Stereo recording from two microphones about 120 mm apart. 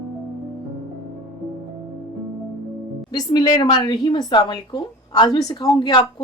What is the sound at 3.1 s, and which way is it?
Speech, 35° left (ahead or behind).